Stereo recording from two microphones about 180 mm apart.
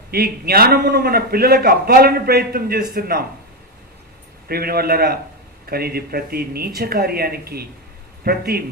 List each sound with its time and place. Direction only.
0.1 s a man's voice: 60° right (ahead or behind)
4.4 s a man's voice: 55° right (ahead or behind)